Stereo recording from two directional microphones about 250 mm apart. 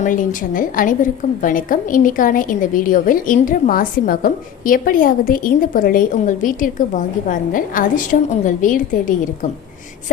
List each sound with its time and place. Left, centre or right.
0.0 s a woman's voice: left